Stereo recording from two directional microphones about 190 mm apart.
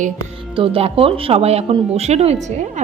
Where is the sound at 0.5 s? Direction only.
30° right (ahead or behind).